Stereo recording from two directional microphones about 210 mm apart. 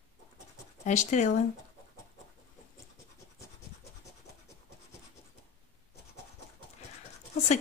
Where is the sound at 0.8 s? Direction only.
35° left (ahead or behind).